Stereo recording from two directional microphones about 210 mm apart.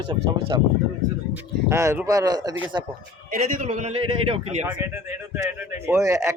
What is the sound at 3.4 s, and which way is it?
A man's voice, 40° right (ahead or behind).